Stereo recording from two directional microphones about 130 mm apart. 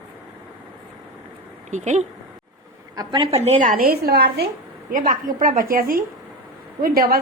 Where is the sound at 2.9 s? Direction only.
35° right (ahead or behind).